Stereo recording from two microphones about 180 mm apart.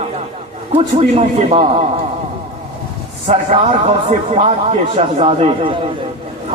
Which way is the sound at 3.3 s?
35° right (ahead or behind).